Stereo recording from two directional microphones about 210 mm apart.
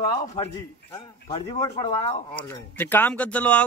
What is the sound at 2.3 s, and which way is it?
Speech, 10° left (ahead or behind).